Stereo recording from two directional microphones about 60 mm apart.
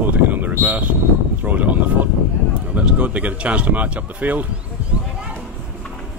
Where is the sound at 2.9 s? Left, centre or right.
Centre.